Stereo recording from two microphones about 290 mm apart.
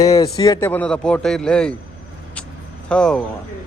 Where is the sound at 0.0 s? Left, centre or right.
Centre.